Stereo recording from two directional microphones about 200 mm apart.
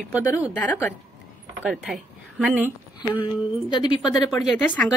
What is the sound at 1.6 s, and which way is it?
A woman's voice, centre (ahead or behind).